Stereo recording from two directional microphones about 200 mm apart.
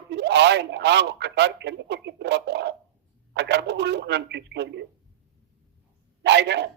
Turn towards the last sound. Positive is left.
turn(degrees=-60)  # may be behind; listen again after turning